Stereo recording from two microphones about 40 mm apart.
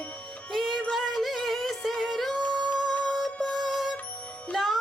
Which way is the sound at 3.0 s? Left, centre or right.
Centre.